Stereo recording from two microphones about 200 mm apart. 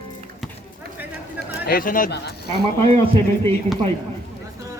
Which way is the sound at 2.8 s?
30° right (ahead or behind).